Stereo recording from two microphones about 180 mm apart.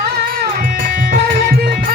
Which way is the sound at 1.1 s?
65° right (ahead or behind).